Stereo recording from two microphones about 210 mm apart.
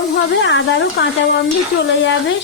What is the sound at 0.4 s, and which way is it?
Speech, 55° left (ahead or behind).